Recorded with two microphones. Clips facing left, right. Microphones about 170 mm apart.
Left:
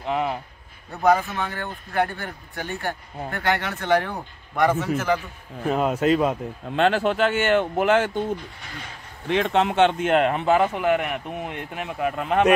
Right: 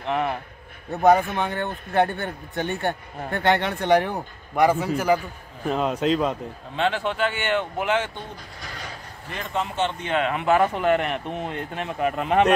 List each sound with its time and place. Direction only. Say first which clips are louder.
0.0 s speech: even; 15° left (ahead or behind)
1.0 s speech: right 2 dB; 20° right (ahead or behind)
4.6 s a man's voice: right 1 dB; centre (ahead or behind)
6.8 s speech: left 4 dB; 45° left (ahead or behind)
9.3 s a man's voice: left 8 dB; 80° left
10.0 s speech: left 4 dB; 45° left (ahead or behind)
10.4 s speech: even; 20° left (ahead or behind)
10.9 s speech: right 1 dB; 5° left (ahead or behind)
12.1 s a man's voice: left 1 dB; centre (ahead or behind)